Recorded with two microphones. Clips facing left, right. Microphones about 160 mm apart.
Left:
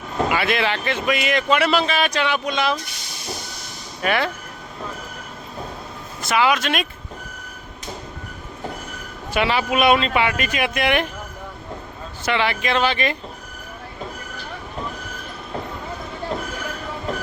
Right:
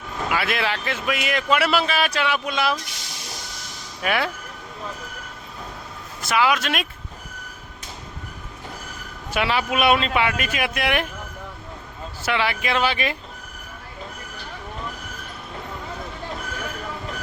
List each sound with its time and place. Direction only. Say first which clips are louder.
0.3 s speech: left 1 dB; centre (ahead or behind)
2.8 s a sound: left 1 dB; 90° right
4.0 s speech: left 2 dB; 5° right (ahead or behind)
6.2 s speech: left 2 dB; centre (ahead or behind)
9.3 s speech: left 2 dB; centre (ahead or behind)
12.2 s speech: left 2 dB; 5° right (ahead or behind)